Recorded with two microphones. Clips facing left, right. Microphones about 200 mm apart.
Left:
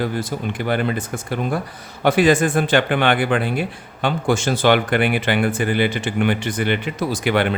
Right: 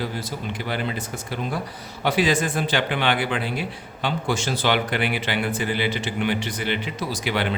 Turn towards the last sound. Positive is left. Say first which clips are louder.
# left 6 dB
turn(degrees=55)  # may be behind; listen again after turning